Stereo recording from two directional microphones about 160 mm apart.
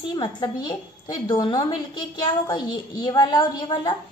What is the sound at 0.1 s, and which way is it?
A woman's voice, 30° left (ahead or behind).